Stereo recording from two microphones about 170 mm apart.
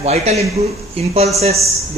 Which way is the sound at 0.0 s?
40° right (ahead or behind).